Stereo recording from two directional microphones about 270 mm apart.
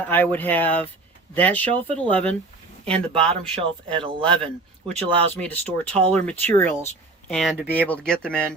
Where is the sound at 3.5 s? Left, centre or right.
Centre.